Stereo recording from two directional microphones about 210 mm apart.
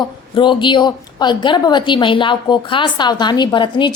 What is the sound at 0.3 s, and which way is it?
A woman's voice, 20° left (ahead or behind).